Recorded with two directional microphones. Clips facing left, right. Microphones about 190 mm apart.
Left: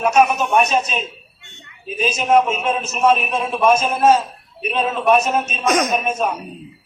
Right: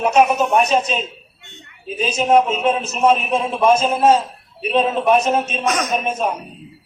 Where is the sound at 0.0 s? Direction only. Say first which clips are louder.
Right 1 dB; 30° right (ahead or behind).